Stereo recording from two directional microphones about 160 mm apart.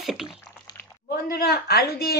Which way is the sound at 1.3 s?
80° left.